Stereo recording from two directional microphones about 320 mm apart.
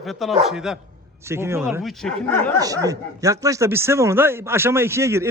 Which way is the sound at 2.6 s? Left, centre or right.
Centre.